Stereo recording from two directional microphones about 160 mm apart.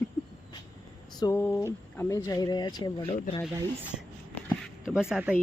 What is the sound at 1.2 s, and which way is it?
Speech, 15° left (ahead or behind).